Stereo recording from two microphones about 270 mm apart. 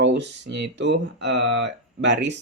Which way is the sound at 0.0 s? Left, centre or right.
Right.